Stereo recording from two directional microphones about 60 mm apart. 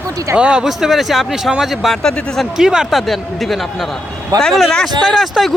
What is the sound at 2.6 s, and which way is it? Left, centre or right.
Speech, centre.